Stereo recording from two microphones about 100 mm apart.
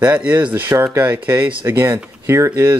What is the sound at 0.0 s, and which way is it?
Speech, 15° right (ahead or behind).